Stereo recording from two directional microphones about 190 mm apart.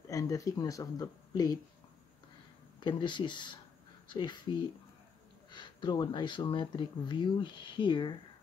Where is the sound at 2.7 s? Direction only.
25° left (ahead or behind).